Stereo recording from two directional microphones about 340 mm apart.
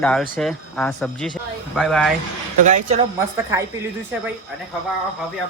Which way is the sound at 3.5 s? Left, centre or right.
Centre.